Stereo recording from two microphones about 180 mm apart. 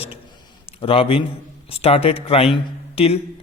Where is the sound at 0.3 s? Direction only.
30° left (ahead or behind).